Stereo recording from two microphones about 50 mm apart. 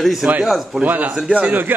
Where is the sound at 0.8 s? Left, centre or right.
Right.